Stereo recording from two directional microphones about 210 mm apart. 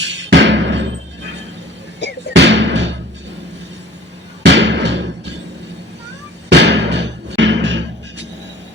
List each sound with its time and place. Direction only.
0.3 s music: 60° right (ahead or behind)
2.3 s music: 55° right (ahead or behind)
4.4 s music: 60° right (ahead or behind)
6.5 s music: 55° right (ahead or behind)